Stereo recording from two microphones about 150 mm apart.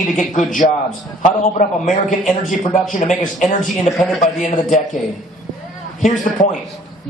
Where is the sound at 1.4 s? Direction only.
55° left (ahead or behind).